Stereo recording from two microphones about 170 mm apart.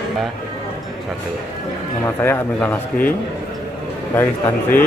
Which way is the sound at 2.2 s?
10° left (ahead or behind).